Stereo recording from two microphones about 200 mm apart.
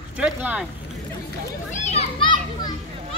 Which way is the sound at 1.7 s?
35° left (ahead or behind).